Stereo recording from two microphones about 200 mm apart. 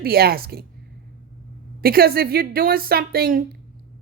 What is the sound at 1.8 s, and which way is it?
A woman's voice, 50° right (ahead or behind).